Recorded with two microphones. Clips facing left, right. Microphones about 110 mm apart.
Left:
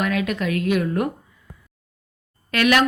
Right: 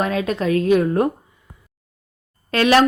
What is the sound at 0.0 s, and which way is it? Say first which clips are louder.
Speech: right 2 dB; 30° right (ahead or behind).